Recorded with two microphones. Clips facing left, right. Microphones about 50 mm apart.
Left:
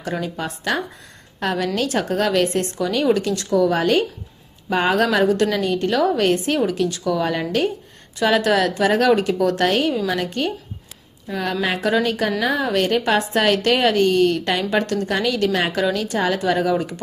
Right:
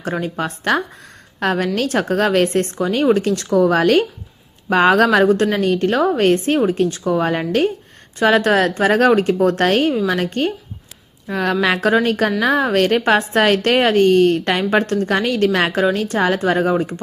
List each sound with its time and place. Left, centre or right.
0.3 s a woman's voice: right
6.0 s a woman's voice: right
11.9 s a woman's voice: right